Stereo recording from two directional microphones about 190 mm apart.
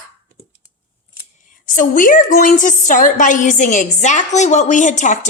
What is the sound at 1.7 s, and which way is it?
A woman's voice, 45° left (ahead or behind).